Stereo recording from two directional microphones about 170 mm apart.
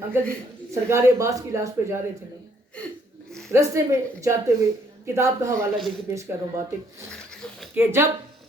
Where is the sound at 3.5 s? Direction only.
15° right (ahead or behind).